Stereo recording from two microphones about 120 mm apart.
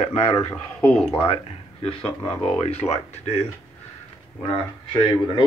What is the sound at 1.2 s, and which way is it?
Speech, 50° left (ahead or behind).